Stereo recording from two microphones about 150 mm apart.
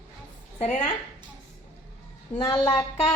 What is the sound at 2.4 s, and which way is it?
Speech, 20° left (ahead or behind).